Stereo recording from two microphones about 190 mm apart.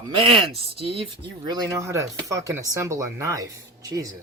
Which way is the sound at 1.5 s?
20° right (ahead or behind).